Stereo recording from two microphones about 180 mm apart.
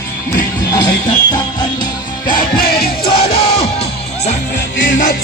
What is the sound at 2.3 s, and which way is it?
Music, 50° left (ahead or behind).